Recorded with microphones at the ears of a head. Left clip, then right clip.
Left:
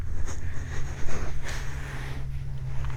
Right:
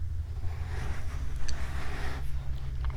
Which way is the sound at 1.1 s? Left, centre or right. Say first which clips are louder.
Left 8 dB; left.